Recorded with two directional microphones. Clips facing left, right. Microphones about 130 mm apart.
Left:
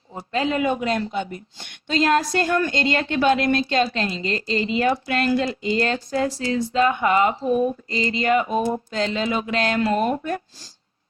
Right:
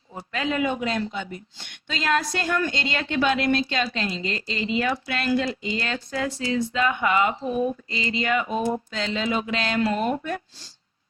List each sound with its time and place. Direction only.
0.1 s speech: 30° left (ahead or behind)